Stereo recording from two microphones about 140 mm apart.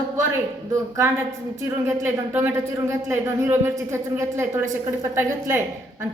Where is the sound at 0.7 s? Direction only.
20° right (ahead or behind).